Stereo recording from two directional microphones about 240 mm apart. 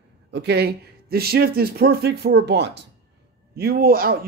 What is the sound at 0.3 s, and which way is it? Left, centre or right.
A man's voice, right.